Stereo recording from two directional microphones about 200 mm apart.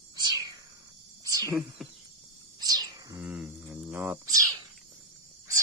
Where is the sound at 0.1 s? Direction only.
20° right (ahead or behind).